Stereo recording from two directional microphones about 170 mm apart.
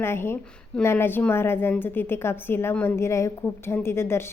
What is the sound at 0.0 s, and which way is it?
A woman's voice, 15° left (ahead or behind).